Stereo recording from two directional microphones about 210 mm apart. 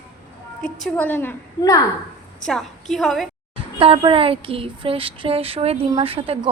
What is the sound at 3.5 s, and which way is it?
Speech, 25° right (ahead or behind).